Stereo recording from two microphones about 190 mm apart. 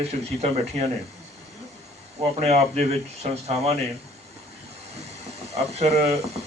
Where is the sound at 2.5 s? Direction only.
35° right (ahead or behind).